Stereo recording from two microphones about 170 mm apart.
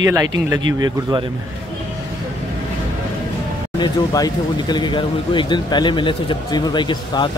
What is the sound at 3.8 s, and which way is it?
Speech, 25° left (ahead or behind).